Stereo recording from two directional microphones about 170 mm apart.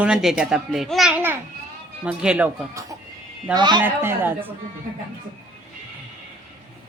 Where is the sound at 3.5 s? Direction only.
25° right (ahead or behind).